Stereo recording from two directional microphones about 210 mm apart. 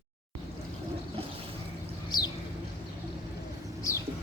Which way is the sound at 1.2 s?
25° right (ahead or behind).